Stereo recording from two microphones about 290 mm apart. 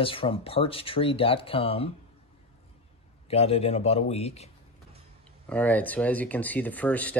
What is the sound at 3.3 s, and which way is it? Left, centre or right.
Speech, left.